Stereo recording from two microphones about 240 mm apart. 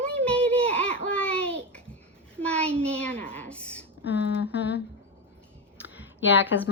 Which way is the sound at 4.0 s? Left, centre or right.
Left.